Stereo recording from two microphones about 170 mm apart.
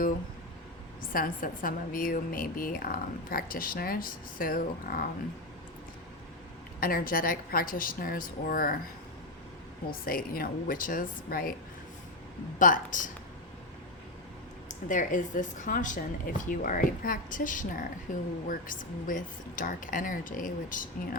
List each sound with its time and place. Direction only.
1.1 s a woman's voice: 55° left (ahead or behind)
6.7 s a woman's voice: 60° left (ahead or behind)
9.9 s a woman's voice: 60° left (ahead or behind)
12.5 s speech: 50° left (ahead or behind)
14.7 s speech: 50° left (ahead or behind)